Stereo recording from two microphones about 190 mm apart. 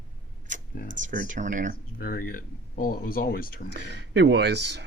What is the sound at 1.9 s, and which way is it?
Speech, 55° left (ahead or behind).